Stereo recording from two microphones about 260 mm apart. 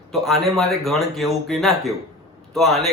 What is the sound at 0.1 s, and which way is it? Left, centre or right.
Speech, centre.